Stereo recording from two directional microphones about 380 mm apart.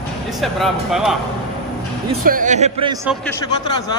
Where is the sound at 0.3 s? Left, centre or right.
Centre.